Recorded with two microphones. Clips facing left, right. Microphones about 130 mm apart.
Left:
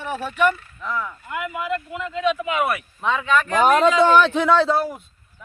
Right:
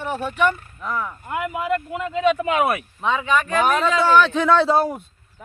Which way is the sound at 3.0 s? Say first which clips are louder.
Left 1 dB; 10° right (ahead or behind).